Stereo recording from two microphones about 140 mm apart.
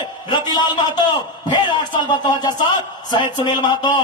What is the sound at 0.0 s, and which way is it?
A man's voice, 30° left (ahead or behind).